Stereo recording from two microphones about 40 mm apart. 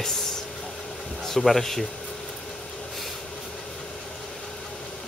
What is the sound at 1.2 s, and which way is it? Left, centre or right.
Speech, centre.